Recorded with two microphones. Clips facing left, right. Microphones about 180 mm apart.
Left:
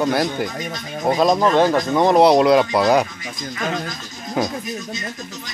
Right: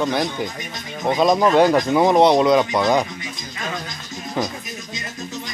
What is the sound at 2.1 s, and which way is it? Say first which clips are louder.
Speech: left 3 dB; 5° left (ahead or behind).